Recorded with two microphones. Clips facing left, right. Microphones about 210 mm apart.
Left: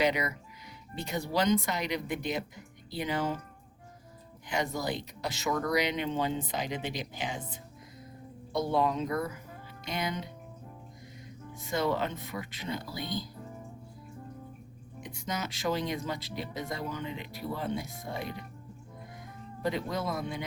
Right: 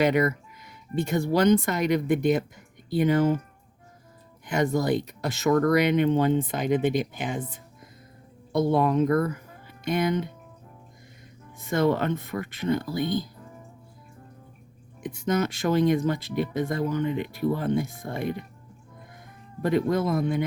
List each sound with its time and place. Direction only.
0.0 s speech: 50° right (ahead or behind)
4.4 s speech: 50° right (ahead or behind)
8.5 s speech: 55° right (ahead or behind)
11.6 s speech: 55° right (ahead or behind)
15.0 s speech: 55° right (ahead or behind)
19.6 s speech: 55° right (ahead or behind)